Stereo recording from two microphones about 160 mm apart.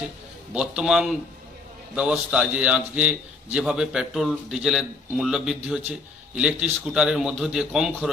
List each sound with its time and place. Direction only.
0.5 s a man's voice: 5° right (ahead or behind)